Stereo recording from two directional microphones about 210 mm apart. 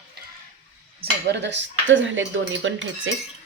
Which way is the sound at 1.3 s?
55° right (ahead or behind).